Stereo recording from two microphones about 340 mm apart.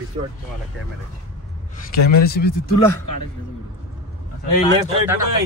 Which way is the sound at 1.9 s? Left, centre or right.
Left.